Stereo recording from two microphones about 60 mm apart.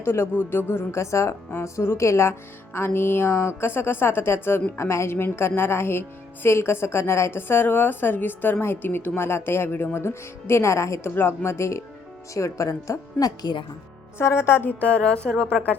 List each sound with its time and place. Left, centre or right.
0.0 s speech: left
2.7 s a woman's voice: left
4.8 s a woman's voice: left
11.1 s speech: left
12.3 s speech: left
14.2 s a woman's voice: left; by 15.5 s centre